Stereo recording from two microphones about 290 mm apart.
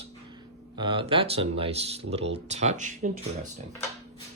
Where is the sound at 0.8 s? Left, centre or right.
Centre.